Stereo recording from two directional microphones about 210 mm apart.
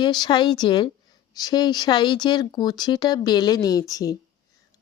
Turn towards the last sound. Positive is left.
turn(degrees=15)  # may be behind; listen again after turning